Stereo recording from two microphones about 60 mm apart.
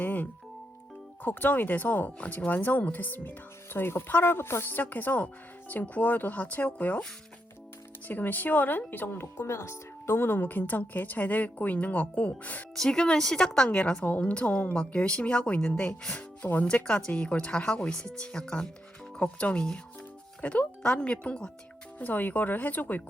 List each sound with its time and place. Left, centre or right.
0.0 s music: left
1.2 s speech: left
8.0 s speech: left
12.7 s speech: centre
21.9 s speech: left